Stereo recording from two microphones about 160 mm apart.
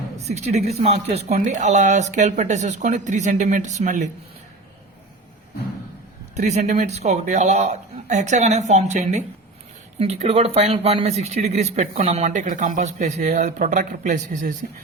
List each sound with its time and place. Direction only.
0.3 s speech: 45° right (ahead or behind)
6.3 s speech: 45° right (ahead or behind)